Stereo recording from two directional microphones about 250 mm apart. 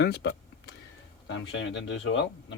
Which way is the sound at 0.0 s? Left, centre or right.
Left.